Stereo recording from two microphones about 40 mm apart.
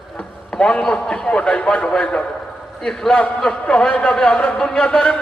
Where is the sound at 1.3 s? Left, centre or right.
Left.